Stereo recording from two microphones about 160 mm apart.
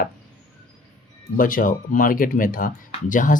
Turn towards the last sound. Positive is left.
turn(degrees=55)  # may be behind; listen again after turning